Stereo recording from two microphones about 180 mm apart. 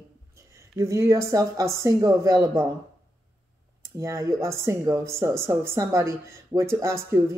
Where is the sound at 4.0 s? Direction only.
15° right (ahead or behind).